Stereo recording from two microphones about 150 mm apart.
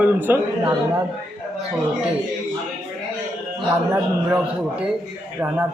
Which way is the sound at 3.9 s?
10° right (ahead or behind).